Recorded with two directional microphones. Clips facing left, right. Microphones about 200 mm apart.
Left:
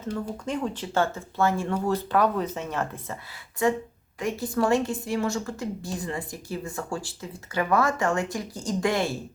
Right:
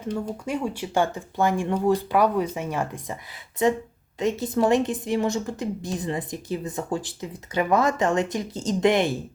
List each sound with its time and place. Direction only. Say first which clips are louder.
0.1 s a woman's voice: right 2 dB; 10° right (ahead or behind)